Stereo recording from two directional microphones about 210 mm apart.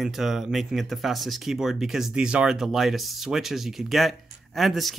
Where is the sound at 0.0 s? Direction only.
Centre (ahead or behind).